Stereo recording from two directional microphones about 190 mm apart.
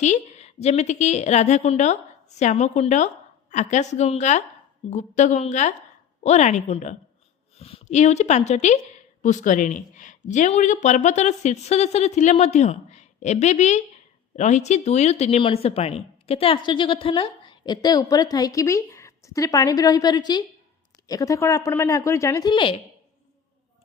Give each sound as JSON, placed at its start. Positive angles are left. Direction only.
{"t": 0.0, "sound": "speech", "side_deg": 35}